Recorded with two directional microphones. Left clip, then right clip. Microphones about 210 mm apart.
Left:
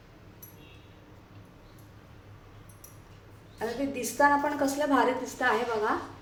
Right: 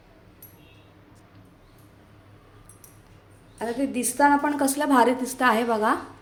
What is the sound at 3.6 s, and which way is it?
A woman's voice, 55° right (ahead or behind).